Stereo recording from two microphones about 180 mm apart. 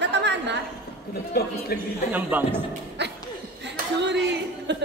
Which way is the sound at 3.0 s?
70° right (ahead or behind).